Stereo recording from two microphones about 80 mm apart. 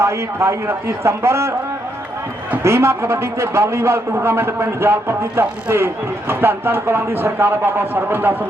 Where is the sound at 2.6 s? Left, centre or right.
Right.